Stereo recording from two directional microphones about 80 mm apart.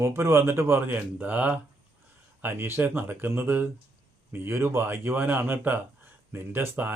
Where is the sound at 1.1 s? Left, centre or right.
Centre.